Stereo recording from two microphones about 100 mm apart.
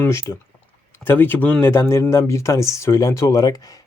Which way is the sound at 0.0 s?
30° left (ahead or behind).